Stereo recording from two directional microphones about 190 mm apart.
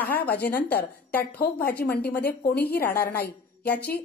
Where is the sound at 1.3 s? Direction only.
55° left (ahead or behind).